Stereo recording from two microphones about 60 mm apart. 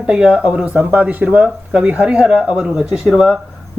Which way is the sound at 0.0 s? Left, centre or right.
Centre.